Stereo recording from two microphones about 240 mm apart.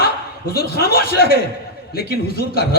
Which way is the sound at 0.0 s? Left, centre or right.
Left.